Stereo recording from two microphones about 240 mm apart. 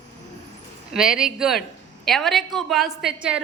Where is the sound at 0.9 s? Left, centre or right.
Centre.